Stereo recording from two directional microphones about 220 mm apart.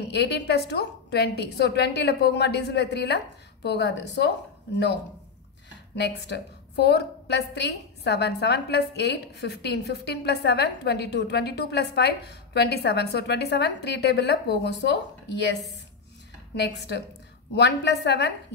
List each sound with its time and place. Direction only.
0.1 s a woman's voice: 50° left (ahead or behind)
5.9 s a woman's voice: 50° left (ahead or behind)